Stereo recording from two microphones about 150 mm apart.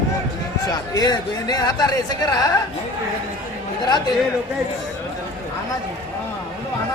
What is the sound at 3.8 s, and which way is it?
Speech, 30° left (ahead or behind).